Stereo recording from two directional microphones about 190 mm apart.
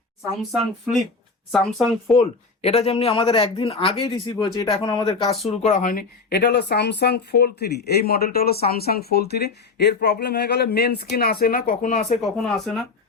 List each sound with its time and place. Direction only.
0.5 s speech: centre (ahead or behind)
2.1 s speech: 35° left (ahead or behind)
5.6 s speech: 40° left (ahead or behind)
12.2 s speech: centre (ahead or behind)